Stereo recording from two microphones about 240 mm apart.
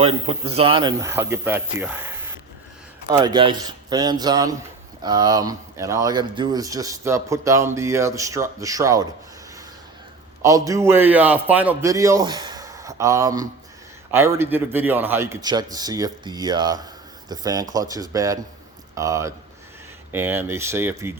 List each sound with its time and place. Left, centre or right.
0.0 s speech: right
10.4 s speech: centre